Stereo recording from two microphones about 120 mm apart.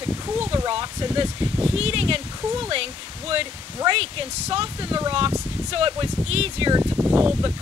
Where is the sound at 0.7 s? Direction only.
45° right (ahead or behind).